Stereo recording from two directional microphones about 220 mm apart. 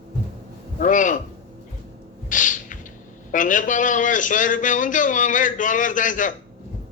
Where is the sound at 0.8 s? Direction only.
35° left (ahead or behind).